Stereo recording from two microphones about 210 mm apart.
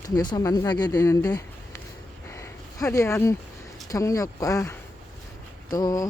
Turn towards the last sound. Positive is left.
turn(degrees=15)  # may be behind; listen again after turning